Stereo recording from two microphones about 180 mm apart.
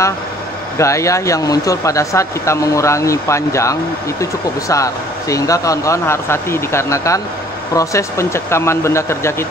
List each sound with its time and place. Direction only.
0.7 s speech: 15° left (ahead or behind)